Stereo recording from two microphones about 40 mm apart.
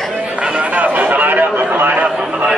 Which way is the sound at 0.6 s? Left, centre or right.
Right.